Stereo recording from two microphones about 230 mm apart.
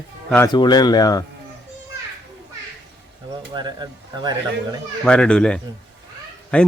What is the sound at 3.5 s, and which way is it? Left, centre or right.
Speech, centre.